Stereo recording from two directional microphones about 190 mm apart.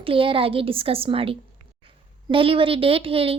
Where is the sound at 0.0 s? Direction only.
30° right (ahead or behind).